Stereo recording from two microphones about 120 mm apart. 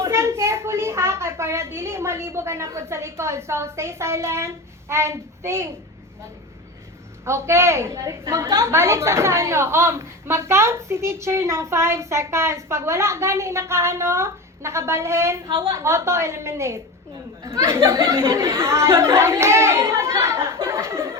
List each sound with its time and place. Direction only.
0.0 s a woman's voice: 20° right (ahead or behind)
7.3 s a woman's voice: 20° right (ahead or behind)